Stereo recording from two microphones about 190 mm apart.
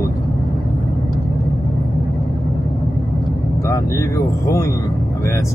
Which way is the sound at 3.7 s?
15° left (ahead or behind).